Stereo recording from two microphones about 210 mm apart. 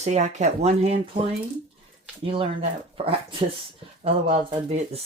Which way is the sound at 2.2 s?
25° right (ahead or behind).